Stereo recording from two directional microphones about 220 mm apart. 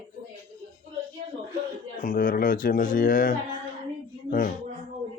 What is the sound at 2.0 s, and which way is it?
Speech, 40° left (ahead or behind).